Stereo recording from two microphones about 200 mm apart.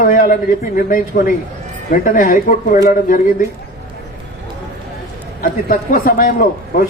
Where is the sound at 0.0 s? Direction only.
40° left (ahead or behind).